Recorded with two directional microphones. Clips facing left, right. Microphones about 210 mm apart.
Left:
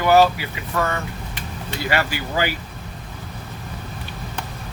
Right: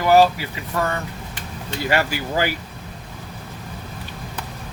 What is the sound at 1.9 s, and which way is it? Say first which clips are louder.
Speech: right 2 dB; 40° right (ahead or behind).